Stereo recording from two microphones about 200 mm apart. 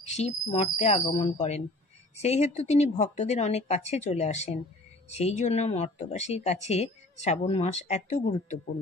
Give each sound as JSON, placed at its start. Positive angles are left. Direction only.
{"t": 0.0, "sound": "speech", "side_deg": 35}